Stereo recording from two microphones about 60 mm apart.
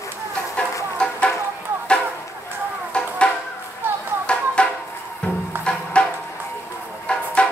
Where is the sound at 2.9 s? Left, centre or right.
Centre.